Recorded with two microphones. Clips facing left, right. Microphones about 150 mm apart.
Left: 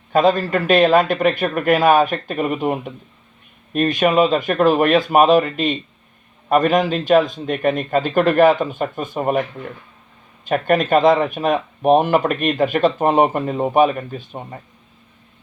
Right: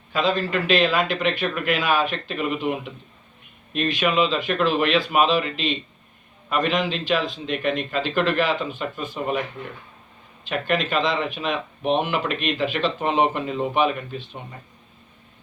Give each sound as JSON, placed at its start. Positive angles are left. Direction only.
{"t": 0.1, "sound": "speech", "side_deg": 50}
{"t": 10.4, "sound": "speech", "side_deg": 50}